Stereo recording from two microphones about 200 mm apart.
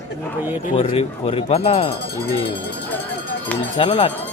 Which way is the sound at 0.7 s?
30° left (ahead or behind).